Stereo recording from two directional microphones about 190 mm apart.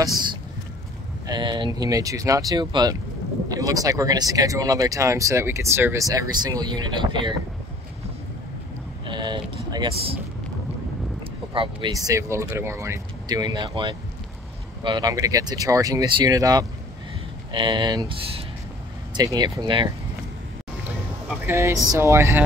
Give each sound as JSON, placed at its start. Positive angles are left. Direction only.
{"t": 1.2, "sound": "speech", "side_deg": -25}
{"t": 9.0, "sound": "vehicle", "side_deg": -25}
{"t": 11.5, "sound": "speech", "side_deg": -25}
{"t": 21.3, "sound": "speech", "side_deg": -15}